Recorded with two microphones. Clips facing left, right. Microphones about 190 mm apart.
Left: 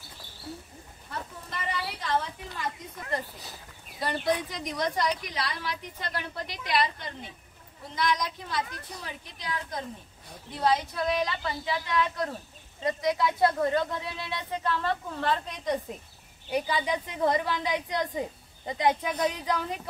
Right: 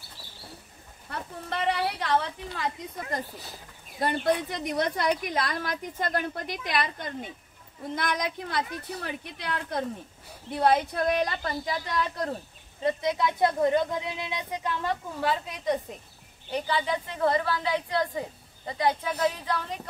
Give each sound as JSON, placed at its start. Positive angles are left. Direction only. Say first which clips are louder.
{"t": 0.2, "sound": "bird", "louder": "right 1 dB", "side_deg": -5}
{"t": 1.1, "sound": "a sound", "louder": "right 4 dB", "side_deg": -65}
{"t": 4.0, "sound": "a woman's voice", "louder": "right 3 dB", "side_deg": -55}
{"t": 12.8, "sound": "a woman's voice", "louder": "right 1 dB", "side_deg": -25}
{"t": 16.4, "sound": "a woman's voice", "louder": "even", "side_deg": 10}